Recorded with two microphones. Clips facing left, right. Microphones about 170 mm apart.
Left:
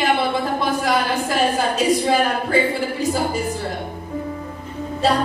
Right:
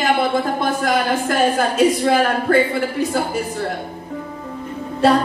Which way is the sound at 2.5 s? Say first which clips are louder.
Right 5 dB; 65° right (ahead or behind).